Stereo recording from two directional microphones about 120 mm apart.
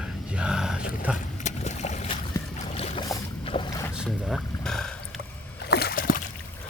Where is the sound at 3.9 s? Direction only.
Centre (ahead or behind).